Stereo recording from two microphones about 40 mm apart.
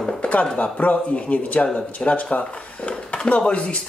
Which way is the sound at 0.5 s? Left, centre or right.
Left.